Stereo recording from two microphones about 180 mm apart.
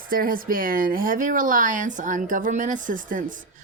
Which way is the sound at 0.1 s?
50° right (ahead or behind).